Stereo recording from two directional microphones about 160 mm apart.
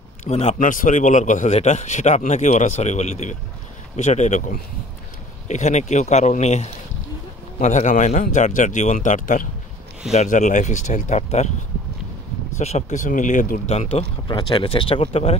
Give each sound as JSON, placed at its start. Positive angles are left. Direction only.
{"t": 0.2, "sound": "speech", "side_deg": 40}
{"t": 0.7, "sound": "speech", "side_deg": 55}
{"t": 12.5, "sound": "speech", "side_deg": 45}